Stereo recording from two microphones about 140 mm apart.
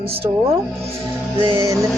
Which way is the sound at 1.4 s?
35° right (ahead or behind).